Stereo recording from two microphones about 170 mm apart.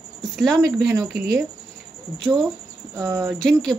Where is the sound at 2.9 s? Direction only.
15° right (ahead or behind).